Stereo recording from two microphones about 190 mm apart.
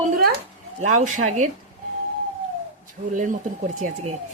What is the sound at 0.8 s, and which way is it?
Speech, 40° right (ahead or behind).